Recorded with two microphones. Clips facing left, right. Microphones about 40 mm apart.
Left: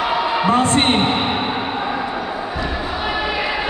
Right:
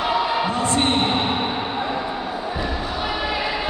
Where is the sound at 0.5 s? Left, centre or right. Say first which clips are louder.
Left 5 dB; left.